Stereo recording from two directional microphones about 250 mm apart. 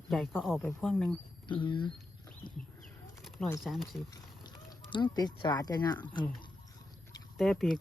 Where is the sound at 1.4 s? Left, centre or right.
Centre.